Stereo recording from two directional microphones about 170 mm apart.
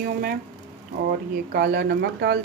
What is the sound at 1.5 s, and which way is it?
Speech, 65° right (ahead or behind).